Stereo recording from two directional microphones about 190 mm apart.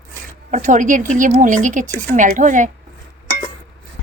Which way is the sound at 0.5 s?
40° right (ahead or behind).